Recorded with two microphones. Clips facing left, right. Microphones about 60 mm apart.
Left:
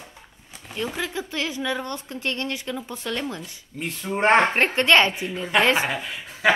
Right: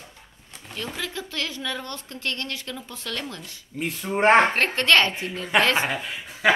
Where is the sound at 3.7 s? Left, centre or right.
Centre.